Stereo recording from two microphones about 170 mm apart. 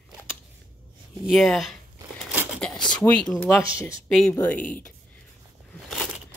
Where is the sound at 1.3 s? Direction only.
Centre (ahead or behind).